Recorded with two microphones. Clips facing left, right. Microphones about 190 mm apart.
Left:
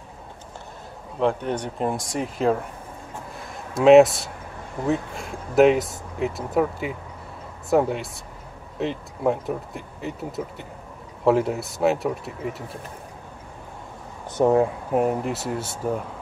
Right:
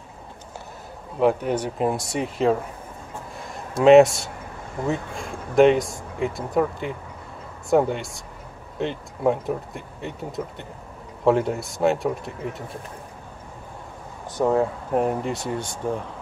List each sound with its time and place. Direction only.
1.2 s speech: 5° right (ahead or behind)
3.8 s speech: centre (ahead or behind)
14.3 s speech: 20° left (ahead or behind)
14.9 s speech: 5° left (ahead or behind)